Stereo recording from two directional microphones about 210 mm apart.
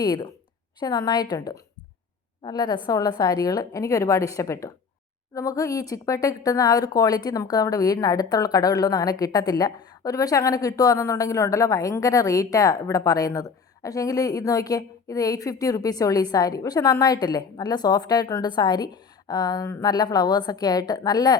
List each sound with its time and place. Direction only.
0.0 s a woman's voice: 20° left (ahead or behind)